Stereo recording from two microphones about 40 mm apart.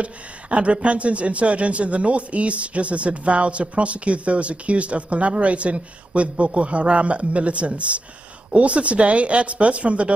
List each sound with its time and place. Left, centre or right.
0.0 s speech: right